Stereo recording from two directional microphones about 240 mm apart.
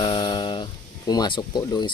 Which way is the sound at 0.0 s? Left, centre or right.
Centre.